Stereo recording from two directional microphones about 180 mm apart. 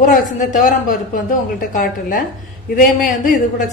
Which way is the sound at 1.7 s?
50° left (ahead or behind).